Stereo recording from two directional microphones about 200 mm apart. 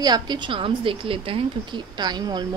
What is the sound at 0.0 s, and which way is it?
A woman's voice, 20° right (ahead or behind).